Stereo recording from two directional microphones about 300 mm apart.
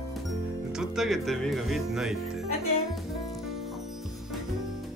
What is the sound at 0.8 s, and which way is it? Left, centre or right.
Speech, centre.